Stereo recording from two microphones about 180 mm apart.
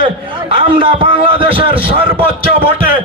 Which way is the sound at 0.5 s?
30° right (ahead or behind).